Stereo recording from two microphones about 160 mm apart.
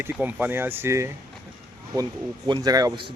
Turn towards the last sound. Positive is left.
turn(degrees=-25)  # may be behind; listen again after turning